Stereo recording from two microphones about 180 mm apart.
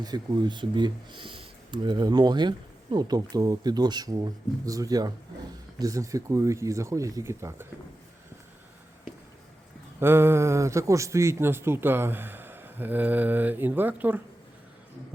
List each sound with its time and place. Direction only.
0.0 s a man's voice: 25° right (ahead or behind)
10.0 s a man's voice: 15° right (ahead or behind)